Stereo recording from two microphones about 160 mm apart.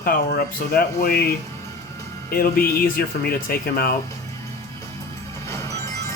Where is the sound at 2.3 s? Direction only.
65° left (ahead or behind).